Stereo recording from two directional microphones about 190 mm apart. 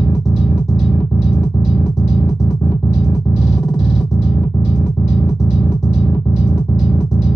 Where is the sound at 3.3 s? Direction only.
Centre (ahead or behind).